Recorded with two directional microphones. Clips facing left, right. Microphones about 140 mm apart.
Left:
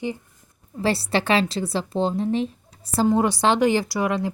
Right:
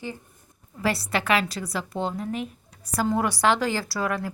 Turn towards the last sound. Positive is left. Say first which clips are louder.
# left 4 dB
turn(degrees=20)  # may be behind; listen again after turning